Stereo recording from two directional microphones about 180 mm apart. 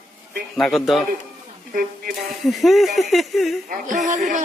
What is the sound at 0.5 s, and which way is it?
Speech, centre (ahead or behind).